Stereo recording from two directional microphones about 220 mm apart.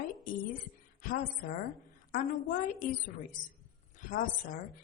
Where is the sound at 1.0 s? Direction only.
40° left (ahead or behind).